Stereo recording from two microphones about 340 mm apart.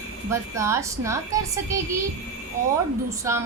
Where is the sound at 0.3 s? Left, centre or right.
Centre.